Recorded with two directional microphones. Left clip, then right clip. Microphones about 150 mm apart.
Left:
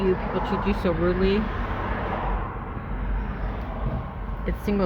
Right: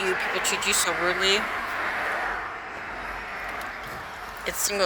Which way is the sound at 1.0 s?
5° left (ahead or behind).